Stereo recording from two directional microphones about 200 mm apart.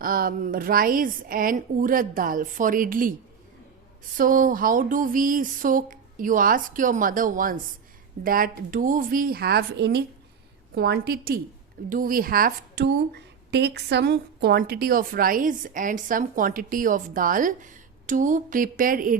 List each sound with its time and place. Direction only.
0.0 s a woman's voice: 45° right (ahead or behind)
4.2 s a woman's voice: 40° right (ahead or behind)